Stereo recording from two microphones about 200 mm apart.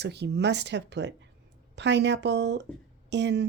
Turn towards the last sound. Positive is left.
turn(degrees=-60)  # may be behind; listen again after turning